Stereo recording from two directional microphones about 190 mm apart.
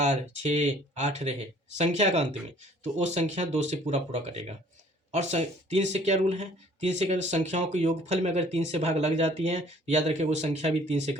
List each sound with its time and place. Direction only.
0.0 s speech: 35° right (ahead or behind)